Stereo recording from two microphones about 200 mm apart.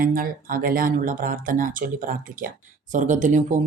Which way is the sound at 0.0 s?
45° right (ahead or behind).